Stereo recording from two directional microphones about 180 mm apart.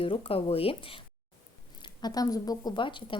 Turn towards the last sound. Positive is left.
turn(degrees=25)  # may be behind; listen again after turning